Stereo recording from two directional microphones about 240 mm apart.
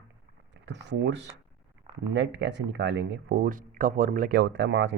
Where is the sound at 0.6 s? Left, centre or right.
Right.